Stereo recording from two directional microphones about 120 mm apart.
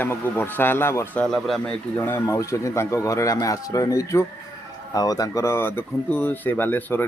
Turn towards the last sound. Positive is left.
turn(degrees=15)  # may be behind; listen again after turning